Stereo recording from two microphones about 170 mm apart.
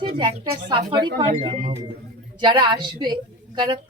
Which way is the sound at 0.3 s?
30° right (ahead or behind).